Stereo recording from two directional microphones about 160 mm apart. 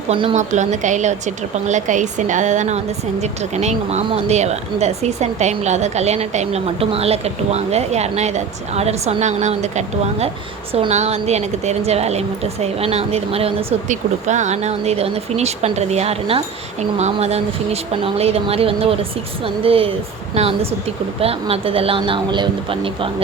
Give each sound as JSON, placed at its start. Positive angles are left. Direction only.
{"t": 0.1, "sound": "a woman's voice", "side_deg": -30}
{"t": 0.3, "sound": "a woman's voice", "side_deg": -50}